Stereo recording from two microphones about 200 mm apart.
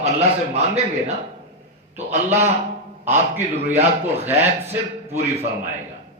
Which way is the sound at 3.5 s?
30° right (ahead or behind).